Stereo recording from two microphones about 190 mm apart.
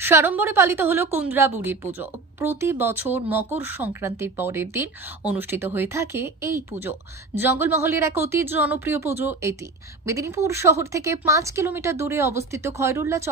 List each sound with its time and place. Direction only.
0.0 s a woman's voice: 10° right (ahead or behind)